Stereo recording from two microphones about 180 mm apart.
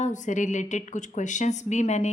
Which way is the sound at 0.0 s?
45° left (ahead or behind).